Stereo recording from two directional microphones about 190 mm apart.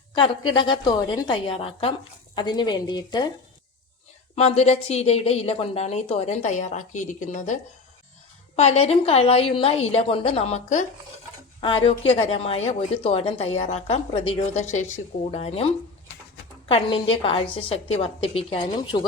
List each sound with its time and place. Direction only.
0.1 s a woman's voice: 25° left (ahead or behind)
4.4 s a woman's voice: 35° left (ahead or behind)